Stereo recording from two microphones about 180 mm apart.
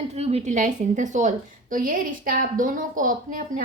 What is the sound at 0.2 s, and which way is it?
A woman's voice, 35° right (ahead or behind).